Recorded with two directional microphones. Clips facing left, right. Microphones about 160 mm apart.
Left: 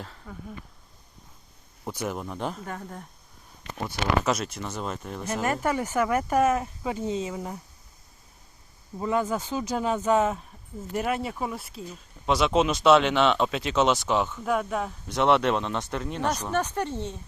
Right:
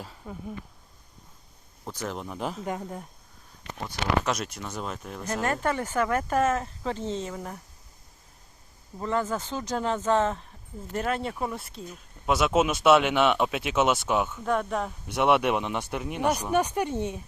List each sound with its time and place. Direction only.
0.2 s speech: 15° right (ahead or behind)
1.8 s speech: 10° left (ahead or behind)
2.6 s speech: 15° right (ahead or behind)
3.8 s speech: 5° left (ahead or behind)
9.0 s speech: 10° left (ahead or behind); by 14.4 s 10° right (ahead or behind)
14.4 s speech: 5° left (ahead or behind)
15.0 s speech: 10° right (ahead or behind)